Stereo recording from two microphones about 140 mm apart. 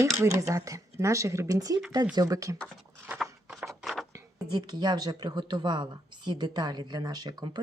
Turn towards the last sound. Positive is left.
turn(degrees=-30)  # may be behind; listen again after turning